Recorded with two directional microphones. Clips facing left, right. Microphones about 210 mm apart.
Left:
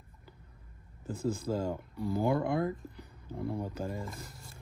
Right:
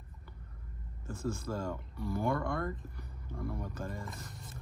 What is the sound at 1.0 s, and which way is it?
Speech, 20° left (ahead or behind).